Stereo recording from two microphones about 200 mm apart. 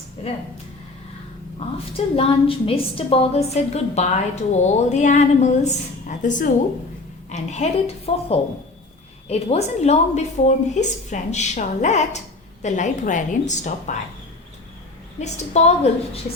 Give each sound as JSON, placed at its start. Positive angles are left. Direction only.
{"t": 1.5, "sound": "a woman's voice", "side_deg": 30}
{"t": 15.2, "sound": "a woman's voice", "side_deg": 35}